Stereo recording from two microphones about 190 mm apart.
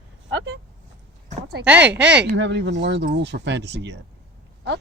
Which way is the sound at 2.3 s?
70° right (ahead or behind).